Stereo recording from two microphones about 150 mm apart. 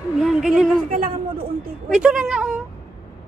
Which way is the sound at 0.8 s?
70° right (ahead or behind).